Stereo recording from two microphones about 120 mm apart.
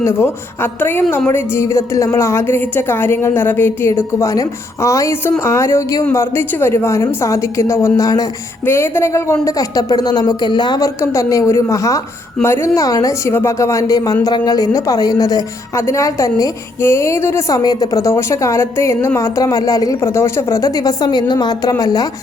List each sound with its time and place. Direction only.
0.0 s a woman's voice: 20° left (ahead or behind)